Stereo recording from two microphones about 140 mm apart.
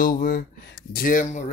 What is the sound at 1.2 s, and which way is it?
Speech, 55° left (ahead or behind).